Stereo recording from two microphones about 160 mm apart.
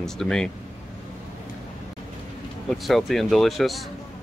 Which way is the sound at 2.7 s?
Centre (ahead or behind).